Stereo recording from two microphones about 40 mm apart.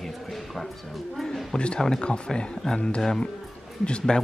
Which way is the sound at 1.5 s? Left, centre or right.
Left.